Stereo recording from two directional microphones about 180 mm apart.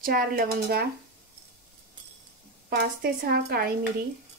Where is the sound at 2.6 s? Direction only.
60° right (ahead or behind).